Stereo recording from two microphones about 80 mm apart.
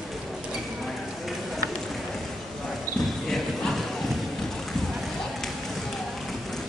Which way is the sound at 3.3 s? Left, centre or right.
Centre.